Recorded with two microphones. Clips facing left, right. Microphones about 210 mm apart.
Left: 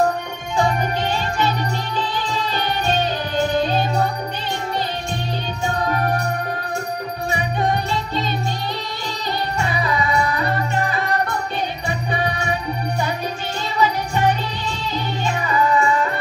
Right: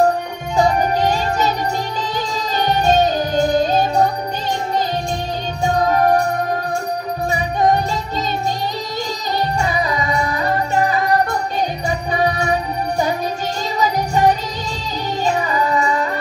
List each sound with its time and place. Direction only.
0.6 s music: 40° right (ahead or behind)
2.5 s music: 40° right (ahead or behind)
5.9 s music: 40° right (ahead or behind)
7.5 s jingle bell: 40° right (ahead or behind)
9.6 s music: 40° right (ahead or behind)
13.7 s music: 40° right (ahead or behind)